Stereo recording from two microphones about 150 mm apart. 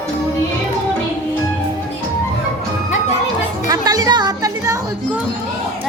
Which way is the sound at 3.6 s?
25° right (ahead or behind).